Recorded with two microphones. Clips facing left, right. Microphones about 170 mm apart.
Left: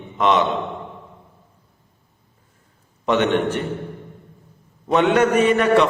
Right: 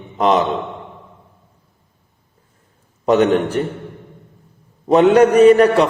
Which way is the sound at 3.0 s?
40° right (ahead or behind).